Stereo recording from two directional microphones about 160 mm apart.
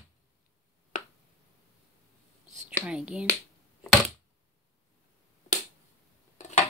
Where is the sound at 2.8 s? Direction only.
5° right (ahead or behind).